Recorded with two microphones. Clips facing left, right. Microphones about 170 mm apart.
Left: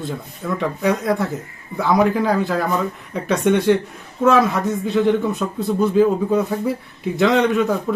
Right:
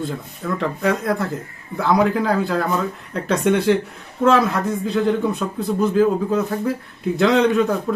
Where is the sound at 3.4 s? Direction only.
5° right (ahead or behind).